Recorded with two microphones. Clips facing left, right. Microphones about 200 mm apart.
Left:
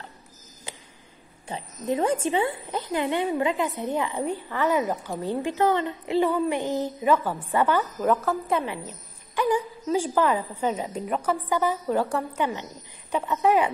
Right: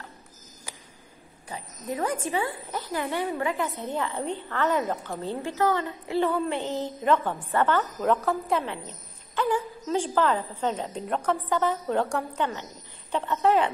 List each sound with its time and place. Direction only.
0.7 s a sound: 25° left (ahead or behind)
1.5 s a woman's voice: 25° left (ahead or behind); by 8.7 s centre (ahead or behind)
8.8 s a woman's voice: 10° left (ahead or behind)